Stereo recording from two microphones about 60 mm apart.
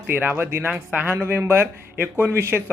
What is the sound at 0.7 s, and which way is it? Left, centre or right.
Speech, centre.